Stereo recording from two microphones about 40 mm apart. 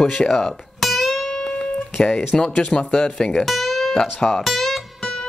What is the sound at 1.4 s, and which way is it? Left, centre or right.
Music, centre.